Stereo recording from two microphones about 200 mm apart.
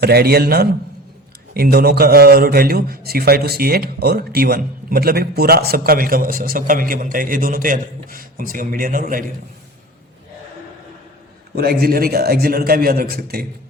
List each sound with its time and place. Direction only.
0.0 s a man's voice: 50° right (ahead or behind)
11.5 s a man's voice: 50° right (ahead or behind)